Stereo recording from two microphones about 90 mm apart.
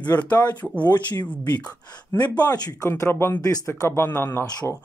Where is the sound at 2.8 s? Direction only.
35° left (ahead or behind).